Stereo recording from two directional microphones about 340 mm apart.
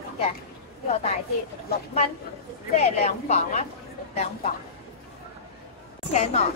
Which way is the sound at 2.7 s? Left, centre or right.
Centre.